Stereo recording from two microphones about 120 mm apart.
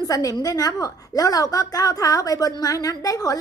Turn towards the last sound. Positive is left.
turn(degrees=30)  # may be behind; listen again after turning